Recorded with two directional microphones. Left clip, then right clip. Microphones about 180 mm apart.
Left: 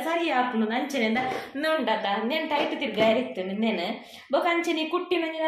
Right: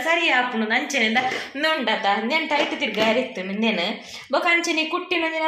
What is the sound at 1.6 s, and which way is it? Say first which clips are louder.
Speech: right 4 dB; 25° right (ahead or behind).